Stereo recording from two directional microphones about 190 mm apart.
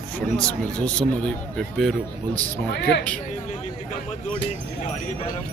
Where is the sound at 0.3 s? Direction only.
5° left (ahead or behind).